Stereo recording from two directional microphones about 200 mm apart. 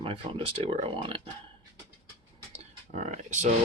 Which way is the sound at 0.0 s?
25° right (ahead or behind).